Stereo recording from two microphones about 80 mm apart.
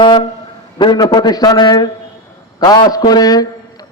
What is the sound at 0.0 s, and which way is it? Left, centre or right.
Speech, left.